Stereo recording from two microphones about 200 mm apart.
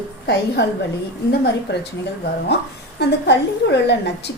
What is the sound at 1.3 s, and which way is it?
Speech, 55° left (ahead or behind).